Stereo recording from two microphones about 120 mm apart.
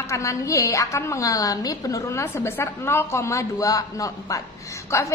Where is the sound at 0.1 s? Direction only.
25° left (ahead or behind).